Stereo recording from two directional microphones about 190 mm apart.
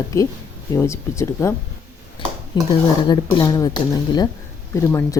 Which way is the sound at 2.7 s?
20° left (ahead or behind).